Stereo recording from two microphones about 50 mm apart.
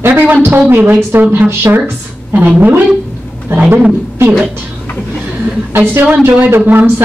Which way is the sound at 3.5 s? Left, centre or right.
Right.